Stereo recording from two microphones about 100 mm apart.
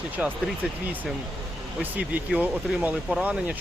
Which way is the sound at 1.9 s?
15° right (ahead or behind).